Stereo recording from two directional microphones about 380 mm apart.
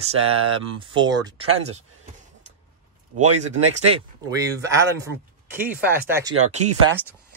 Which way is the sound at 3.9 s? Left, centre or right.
Centre.